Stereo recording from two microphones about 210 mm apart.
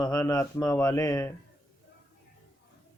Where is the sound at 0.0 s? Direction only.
20° left (ahead or behind).